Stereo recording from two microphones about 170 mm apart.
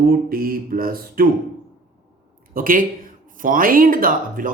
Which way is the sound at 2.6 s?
55° right (ahead or behind).